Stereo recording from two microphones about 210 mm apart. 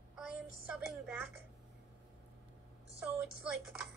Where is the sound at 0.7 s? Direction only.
5° right (ahead or behind).